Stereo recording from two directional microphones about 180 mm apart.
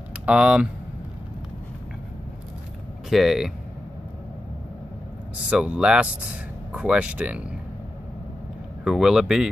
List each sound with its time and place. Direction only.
0.2 s speech: 5° right (ahead or behind)
3.1 s speech: centre (ahead or behind)
5.5 s speech: 5° right (ahead or behind)
8.8 s speech: 5° right (ahead or behind)